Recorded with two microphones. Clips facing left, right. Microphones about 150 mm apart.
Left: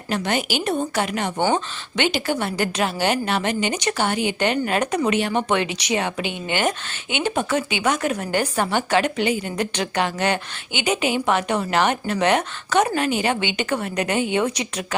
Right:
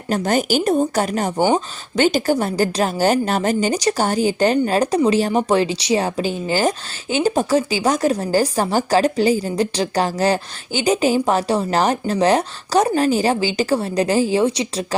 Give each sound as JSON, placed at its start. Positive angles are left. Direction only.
{"t": 0.1, "sound": "speech", "side_deg": -40}